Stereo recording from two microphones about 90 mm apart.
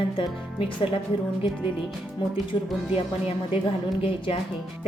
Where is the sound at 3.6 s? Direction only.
75° left (ahead or behind).